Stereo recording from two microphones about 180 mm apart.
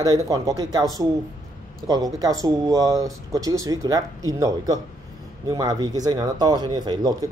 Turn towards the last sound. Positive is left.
turn(degrees=-20)  # may be behind; listen again after turning